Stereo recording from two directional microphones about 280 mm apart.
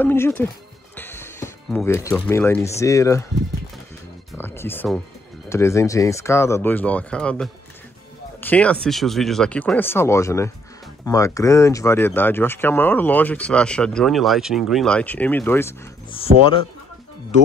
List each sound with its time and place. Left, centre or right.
0.0 s speech: centre
0.9 s music: centre
2.1 s speech: centre
4.3 s music: centre
5.5 s speech: centre
8.4 s a sound: centre
8.8 s speech: centre
16.1 s speech: centre